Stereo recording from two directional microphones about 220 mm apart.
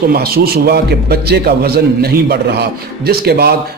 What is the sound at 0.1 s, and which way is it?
A man's voice, 45° right (ahead or behind).